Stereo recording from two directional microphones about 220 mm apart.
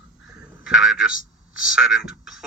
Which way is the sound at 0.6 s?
Centre (ahead or behind).